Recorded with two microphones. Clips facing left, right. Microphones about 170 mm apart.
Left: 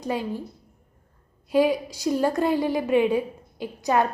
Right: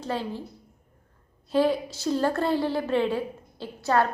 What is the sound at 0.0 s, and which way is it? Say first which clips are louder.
Speech: left 3 dB; 15° left (ahead or behind).